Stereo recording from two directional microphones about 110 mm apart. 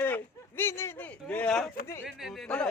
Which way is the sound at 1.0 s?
15° left (ahead or behind).